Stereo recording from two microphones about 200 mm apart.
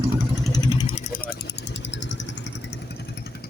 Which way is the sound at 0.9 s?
40° left (ahead or behind).